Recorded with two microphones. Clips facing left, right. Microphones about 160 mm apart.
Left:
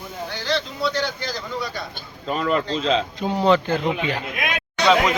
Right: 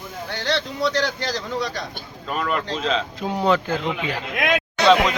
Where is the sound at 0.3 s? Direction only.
70° right (ahead or behind).